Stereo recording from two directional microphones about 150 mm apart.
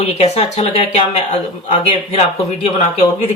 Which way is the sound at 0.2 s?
45° left (ahead or behind).